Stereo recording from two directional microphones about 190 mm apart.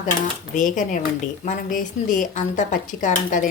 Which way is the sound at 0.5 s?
45° left (ahead or behind).